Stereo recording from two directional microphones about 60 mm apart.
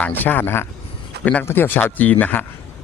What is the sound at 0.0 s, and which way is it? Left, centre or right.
Speech, left.